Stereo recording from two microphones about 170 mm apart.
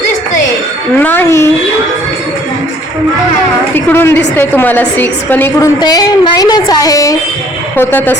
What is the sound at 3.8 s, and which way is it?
A woman's voice, 15° left (ahead or behind).